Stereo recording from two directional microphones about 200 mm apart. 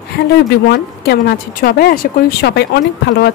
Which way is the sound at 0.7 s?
55° left (ahead or behind).